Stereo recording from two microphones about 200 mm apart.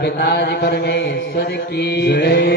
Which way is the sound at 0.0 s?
55° left (ahead or behind).